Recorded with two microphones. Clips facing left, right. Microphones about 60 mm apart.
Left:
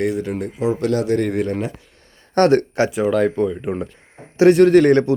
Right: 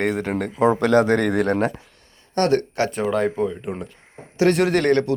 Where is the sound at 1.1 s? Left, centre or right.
Right.